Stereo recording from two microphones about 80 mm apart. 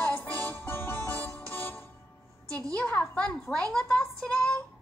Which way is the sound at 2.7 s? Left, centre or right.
Centre.